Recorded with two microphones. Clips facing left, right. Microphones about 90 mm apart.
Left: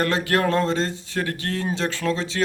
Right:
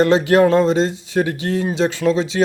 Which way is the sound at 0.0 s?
20° right (ahead or behind).